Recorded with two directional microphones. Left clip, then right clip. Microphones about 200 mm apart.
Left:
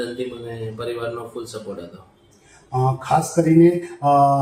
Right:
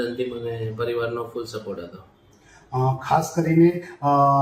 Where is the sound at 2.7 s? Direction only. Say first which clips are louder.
Left 2 dB; 30° left (ahead or behind).